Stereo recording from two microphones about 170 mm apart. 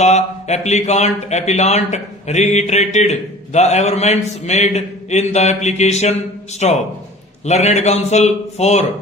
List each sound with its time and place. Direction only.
0.0 s speech: 40° left (ahead or behind)